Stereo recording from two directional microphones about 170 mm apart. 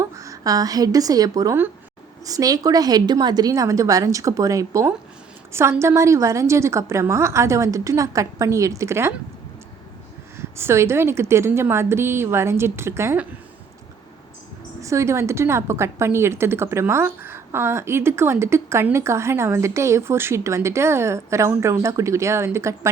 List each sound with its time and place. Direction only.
0.0 s a woman's voice: 20° right (ahead or behind)
10.3 s a woman's voice: 15° right (ahead or behind)
14.8 s a woman's voice: 15° right (ahead or behind)